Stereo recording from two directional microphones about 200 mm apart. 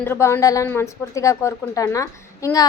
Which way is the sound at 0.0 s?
10° left (ahead or behind).